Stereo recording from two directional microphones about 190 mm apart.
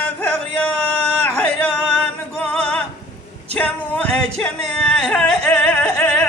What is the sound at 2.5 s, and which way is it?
Music, 5° left (ahead or behind).